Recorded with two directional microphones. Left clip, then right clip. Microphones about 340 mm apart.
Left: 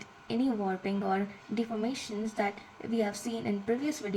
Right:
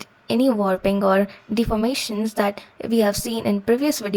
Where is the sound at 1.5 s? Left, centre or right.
Right.